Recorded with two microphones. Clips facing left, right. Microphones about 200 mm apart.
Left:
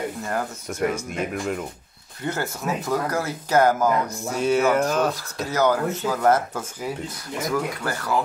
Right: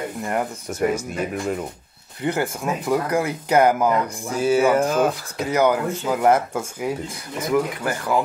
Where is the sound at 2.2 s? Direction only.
15° right (ahead or behind).